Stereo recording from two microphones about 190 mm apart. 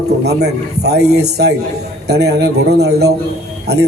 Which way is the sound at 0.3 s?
60° right (ahead or behind).